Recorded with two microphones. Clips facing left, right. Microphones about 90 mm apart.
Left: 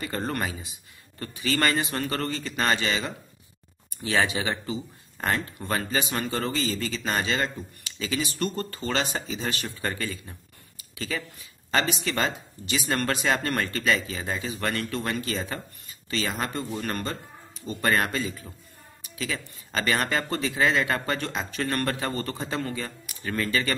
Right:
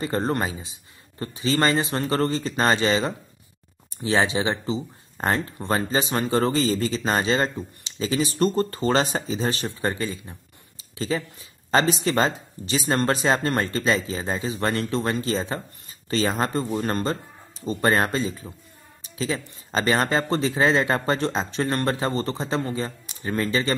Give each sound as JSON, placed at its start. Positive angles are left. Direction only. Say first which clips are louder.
{"t": 0.0, "sound": "speech", "louder": "right 5 dB", "side_deg": -30}